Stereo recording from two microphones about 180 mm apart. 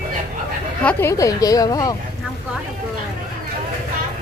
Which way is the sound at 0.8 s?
15° left (ahead or behind).